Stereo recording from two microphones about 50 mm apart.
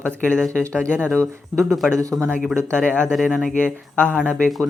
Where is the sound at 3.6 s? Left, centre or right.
Left.